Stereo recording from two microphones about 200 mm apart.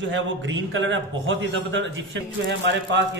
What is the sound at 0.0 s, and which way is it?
A man's voice, 65° right (ahead or behind).